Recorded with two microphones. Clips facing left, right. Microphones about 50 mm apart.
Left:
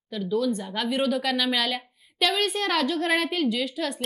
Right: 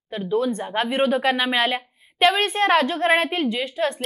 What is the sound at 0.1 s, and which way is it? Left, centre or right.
Speech, right.